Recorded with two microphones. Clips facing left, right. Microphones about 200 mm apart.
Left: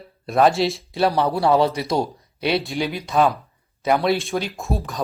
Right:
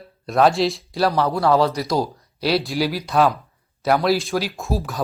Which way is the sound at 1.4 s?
25° left (ahead or behind).